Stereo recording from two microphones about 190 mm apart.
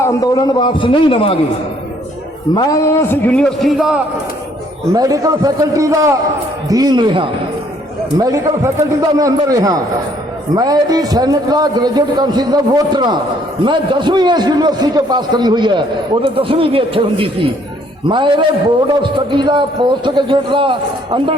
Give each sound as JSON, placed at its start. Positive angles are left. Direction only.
{"t": 0.0, "sound": "a man's voice", "side_deg": 15}
{"t": 2.6, "sound": "a man's voice", "side_deg": 15}
{"t": 4.9, "sound": "a man's voice", "side_deg": -20}